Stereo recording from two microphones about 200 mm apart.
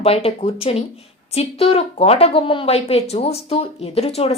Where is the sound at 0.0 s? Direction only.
30° left (ahead or behind).